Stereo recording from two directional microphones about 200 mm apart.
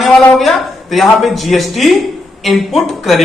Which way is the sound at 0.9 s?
Centre (ahead or behind).